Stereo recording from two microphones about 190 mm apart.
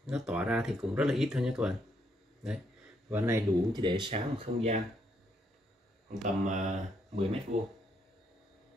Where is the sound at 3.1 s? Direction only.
10° right (ahead or behind); by 4.7 s 30° right (ahead or behind).